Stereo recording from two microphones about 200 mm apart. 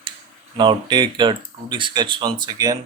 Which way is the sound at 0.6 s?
25° right (ahead or behind).